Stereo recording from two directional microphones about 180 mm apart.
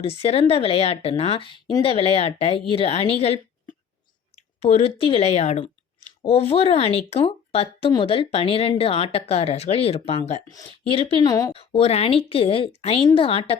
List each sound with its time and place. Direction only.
0.0 s a woman's voice: 35° left (ahead or behind)
11.3 s speech: 20° left (ahead or behind)
11.5 s speech: 35° left (ahead or behind)